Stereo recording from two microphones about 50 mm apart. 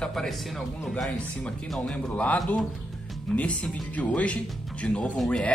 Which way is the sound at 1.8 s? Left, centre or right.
Left.